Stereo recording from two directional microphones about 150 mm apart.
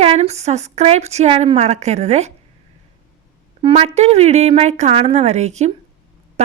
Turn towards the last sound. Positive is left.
turn(degrees=-50)  # may be behind; listen again after turning